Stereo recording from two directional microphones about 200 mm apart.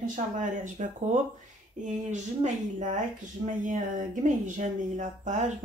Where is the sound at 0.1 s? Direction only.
40° right (ahead or behind).